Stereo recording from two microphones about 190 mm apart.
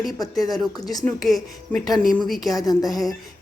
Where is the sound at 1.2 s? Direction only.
Centre (ahead or behind).